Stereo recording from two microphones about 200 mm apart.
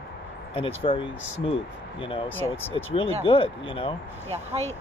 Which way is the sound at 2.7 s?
25° left (ahead or behind).